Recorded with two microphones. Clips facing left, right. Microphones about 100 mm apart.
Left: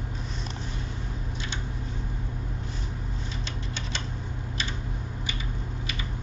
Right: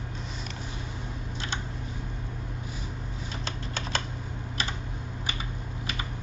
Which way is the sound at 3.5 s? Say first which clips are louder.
Right 1 dB; 45° right (ahead or behind).